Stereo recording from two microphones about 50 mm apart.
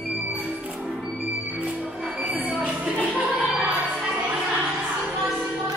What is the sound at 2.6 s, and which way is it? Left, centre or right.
Music, right.